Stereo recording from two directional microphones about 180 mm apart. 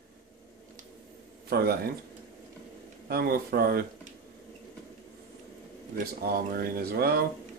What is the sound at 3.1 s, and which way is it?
Speech, 55° right (ahead or behind).